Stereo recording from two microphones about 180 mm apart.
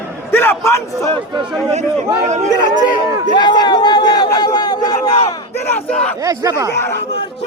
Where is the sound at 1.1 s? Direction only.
25° right (ahead or behind).